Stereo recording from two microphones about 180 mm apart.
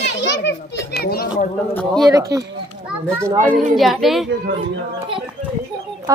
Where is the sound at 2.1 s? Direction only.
20° right (ahead or behind).